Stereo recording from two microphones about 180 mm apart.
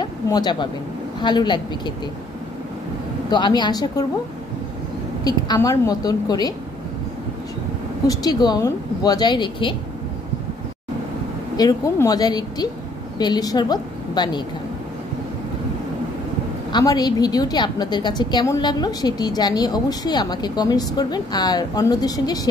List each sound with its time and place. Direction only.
0.0 s a woman's voice: 25° left (ahead or behind)
3.3 s a woman's voice: 25° left (ahead or behind)
5.2 s a woman's voice: 20° left (ahead or behind)
8.1 s a woman's voice: 20° left (ahead or behind)
11.5 s a woman's voice: 20° left (ahead or behind)
16.7 s a woman's voice: 20° left (ahead or behind)